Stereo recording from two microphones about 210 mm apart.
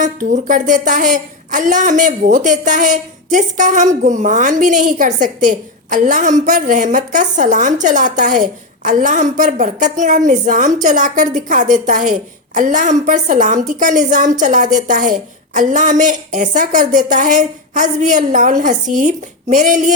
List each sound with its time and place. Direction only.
0.0 s a woman's voice: 40° right (ahead or behind)